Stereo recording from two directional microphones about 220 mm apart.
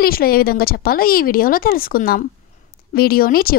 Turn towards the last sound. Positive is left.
turn(degrees=40)  # may be behind; listen again after turning